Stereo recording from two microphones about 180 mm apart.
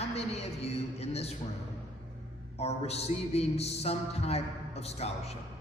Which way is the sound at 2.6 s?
35° left (ahead or behind).